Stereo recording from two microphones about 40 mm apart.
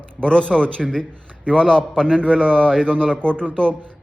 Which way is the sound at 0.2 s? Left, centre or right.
Left.